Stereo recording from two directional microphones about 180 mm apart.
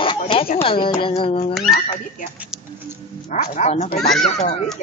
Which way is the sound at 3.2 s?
40° left (ahead or behind).